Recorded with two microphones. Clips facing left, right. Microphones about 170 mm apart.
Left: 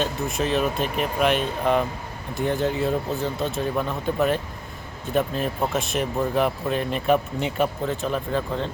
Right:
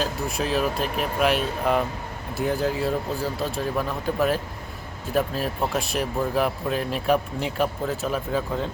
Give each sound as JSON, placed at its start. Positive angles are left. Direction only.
{"t": 0.0, "sound": "speech", "side_deg": 0}